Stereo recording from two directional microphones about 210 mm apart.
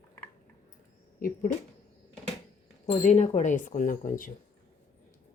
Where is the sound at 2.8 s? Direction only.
30° left (ahead or behind).